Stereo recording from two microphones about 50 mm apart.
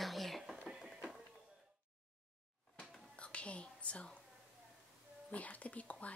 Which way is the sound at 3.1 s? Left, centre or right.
Left.